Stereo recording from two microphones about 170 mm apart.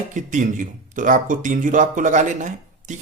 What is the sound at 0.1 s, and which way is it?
Speech, 50° right (ahead or behind).